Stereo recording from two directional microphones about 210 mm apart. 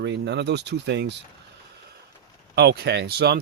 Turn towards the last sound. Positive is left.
turn(degrees=-50)  # may be behind; listen again after turning